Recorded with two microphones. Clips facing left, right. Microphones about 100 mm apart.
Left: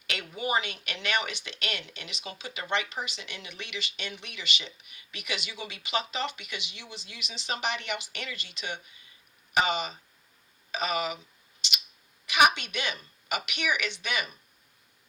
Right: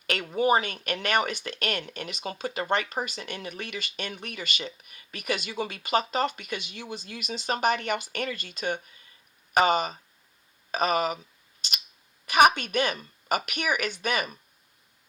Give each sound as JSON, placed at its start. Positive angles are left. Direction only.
{"t": 0.1, "sound": "speech", "side_deg": -45}
{"t": 11.6, "sound": "a sound", "side_deg": -45}
{"t": 12.2, "sound": "a woman's voice", "side_deg": -45}